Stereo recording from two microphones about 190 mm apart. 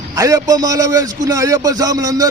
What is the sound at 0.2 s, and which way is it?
A man's voice, 15° right (ahead or behind).